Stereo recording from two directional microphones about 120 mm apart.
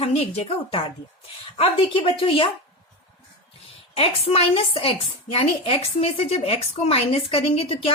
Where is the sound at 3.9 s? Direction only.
55° left (ahead or behind).